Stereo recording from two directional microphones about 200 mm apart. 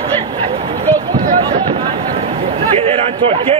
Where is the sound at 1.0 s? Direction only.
20° right (ahead or behind).